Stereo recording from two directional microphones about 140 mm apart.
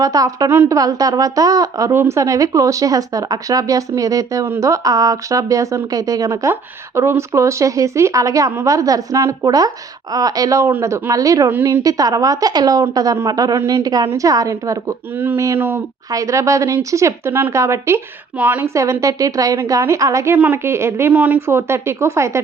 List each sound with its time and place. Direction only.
0.0 s a woman's voice: 25° right (ahead or behind)